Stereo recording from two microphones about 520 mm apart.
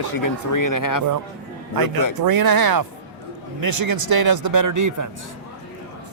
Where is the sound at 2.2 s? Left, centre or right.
Right.